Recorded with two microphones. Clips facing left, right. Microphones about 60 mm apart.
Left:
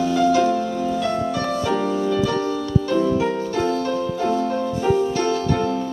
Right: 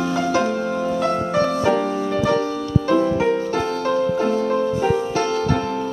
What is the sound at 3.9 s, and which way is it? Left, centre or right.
Music, right.